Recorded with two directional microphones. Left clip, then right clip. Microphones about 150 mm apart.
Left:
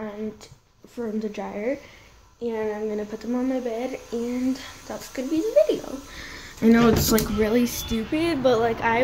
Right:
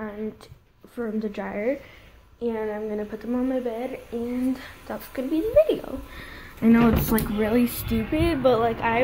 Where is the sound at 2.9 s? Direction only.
20° left (ahead or behind).